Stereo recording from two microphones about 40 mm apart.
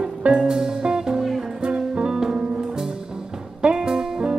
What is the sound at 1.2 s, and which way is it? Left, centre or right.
Music, centre.